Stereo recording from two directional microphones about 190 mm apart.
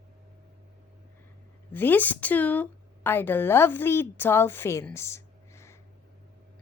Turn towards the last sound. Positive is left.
turn(degrees=15)  # may be behind; listen again after turning